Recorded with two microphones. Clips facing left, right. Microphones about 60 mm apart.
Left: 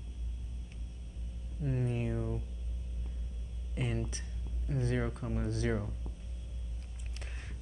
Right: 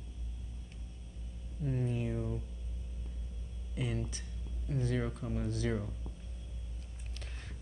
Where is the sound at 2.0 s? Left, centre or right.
Centre.